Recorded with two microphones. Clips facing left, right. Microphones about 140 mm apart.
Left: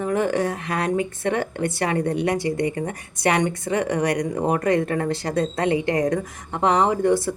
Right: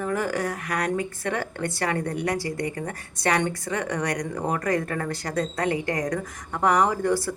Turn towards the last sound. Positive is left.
turn(degrees=20)  # may be behind; listen again after turning